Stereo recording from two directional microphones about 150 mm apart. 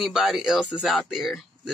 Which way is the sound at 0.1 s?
5° right (ahead or behind).